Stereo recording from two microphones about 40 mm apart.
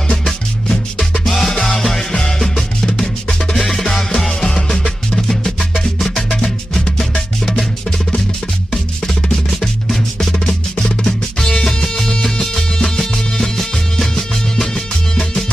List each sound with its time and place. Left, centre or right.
0.1 s music: centre
9.0 s music: centre
10.1 s music: centre